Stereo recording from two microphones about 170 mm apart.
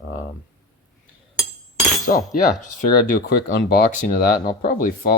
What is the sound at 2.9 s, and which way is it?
Speech, 65° left (ahead or behind).